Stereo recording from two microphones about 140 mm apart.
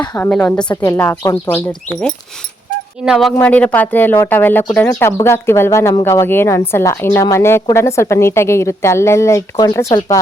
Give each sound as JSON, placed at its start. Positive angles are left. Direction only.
{"t": 0.2, "sound": "a woman's voice", "side_deg": 10}
{"t": 3.0, "sound": "speech", "side_deg": 0}
{"t": 3.3, "sound": "a woman's voice", "side_deg": 10}